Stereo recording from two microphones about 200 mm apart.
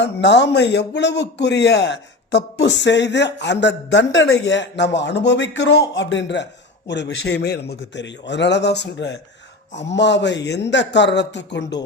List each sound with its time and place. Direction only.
0.0 s a man's voice: 60° left (ahead or behind)